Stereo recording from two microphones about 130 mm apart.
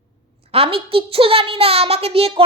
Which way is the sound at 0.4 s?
50° right (ahead or behind).